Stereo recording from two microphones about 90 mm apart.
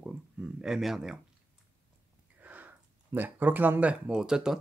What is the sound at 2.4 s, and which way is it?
Speech, 20° right (ahead or behind).